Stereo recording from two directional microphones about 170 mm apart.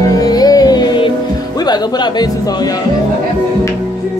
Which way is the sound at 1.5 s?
25° left (ahead or behind).